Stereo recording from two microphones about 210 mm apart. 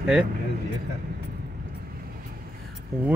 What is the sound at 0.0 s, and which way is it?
Speech, 5° right (ahead or behind).